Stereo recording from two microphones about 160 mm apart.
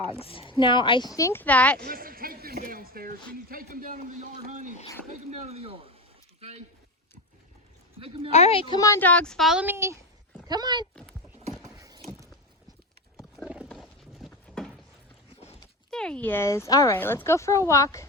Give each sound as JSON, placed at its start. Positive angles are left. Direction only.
{"t": 0.2, "sound": "speech", "side_deg": 35}
{"t": 1.8, "sound": "speech", "side_deg": -65}
{"t": 5.5, "sound": "speech", "side_deg": -40}
{"t": 7.9, "sound": "speech", "side_deg": -35}
{"t": 8.3, "sound": "speech", "side_deg": 40}
{"t": 8.8, "sound": "speech", "side_deg": 15}
{"t": 9.6, "sound": "speech", "side_deg": -15}
{"t": 10.5, "sound": "speech", "side_deg": -25}
{"t": 11.6, "sound": "a sound", "side_deg": -20}
{"t": 13.7, "sound": "horse", "side_deg": 0}
{"t": 15.9, "sound": "speech", "side_deg": 5}